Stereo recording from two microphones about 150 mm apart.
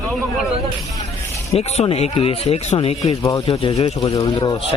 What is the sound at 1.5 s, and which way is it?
Speech, 45° left (ahead or behind).